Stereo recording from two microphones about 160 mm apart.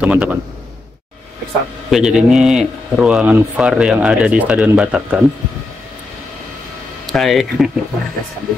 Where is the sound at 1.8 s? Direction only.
Centre (ahead or behind).